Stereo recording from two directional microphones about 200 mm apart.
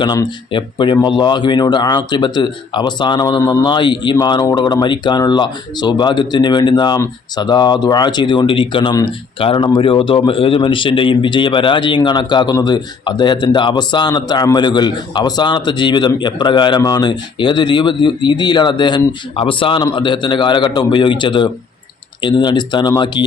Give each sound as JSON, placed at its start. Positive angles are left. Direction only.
{"t": 0.0, "sound": "speech", "side_deg": 20}